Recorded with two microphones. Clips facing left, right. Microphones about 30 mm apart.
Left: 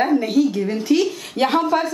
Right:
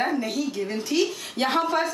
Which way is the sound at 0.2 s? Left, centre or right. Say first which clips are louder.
Left 9 dB; centre.